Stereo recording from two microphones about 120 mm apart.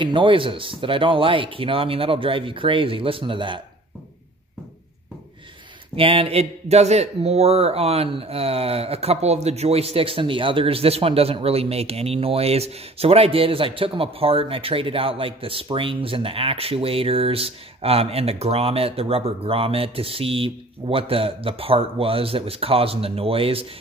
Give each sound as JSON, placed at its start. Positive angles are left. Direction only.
{"t": 0.0, "sound": "a man's voice", "side_deg": -45}
{"t": 5.9, "sound": "a man's voice", "side_deg": -50}